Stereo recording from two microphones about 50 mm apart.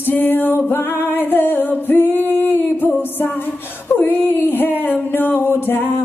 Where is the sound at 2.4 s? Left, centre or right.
Left.